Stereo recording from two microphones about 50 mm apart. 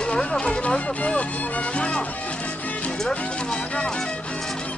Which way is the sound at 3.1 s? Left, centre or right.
Left.